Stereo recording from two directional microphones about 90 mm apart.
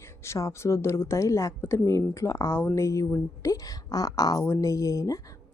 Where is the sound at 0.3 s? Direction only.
35° left (ahead or behind).